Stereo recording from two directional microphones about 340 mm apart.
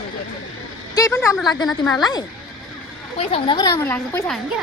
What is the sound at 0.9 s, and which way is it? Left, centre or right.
Speech, centre.